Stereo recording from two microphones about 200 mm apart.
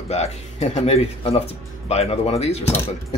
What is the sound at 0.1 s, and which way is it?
Speech, 35° left (ahead or behind).